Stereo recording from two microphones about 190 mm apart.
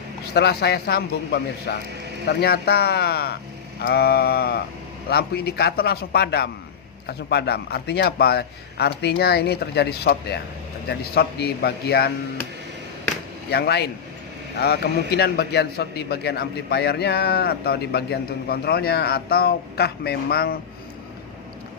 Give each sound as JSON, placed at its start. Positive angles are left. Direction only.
{"t": 0.3, "sound": "a man's voice", "side_deg": 60}
{"t": 13.5, "sound": "a man's voice", "side_deg": 60}